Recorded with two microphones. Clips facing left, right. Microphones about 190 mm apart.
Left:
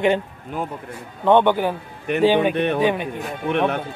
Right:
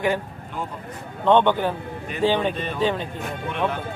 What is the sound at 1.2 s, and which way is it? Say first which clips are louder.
Speech: left 2 dB; 10° left (ahead or behind).